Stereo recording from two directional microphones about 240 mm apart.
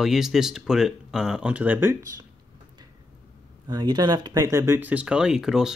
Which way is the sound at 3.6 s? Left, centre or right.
Centre.